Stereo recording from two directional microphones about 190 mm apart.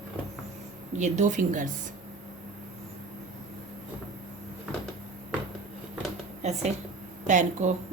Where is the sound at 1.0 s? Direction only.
40° right (ahead or behind).